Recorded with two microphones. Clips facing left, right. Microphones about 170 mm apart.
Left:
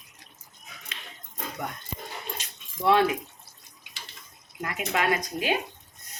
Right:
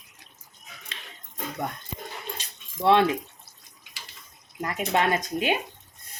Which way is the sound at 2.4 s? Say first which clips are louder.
Right 3 dB; 30° right (ahead or behind).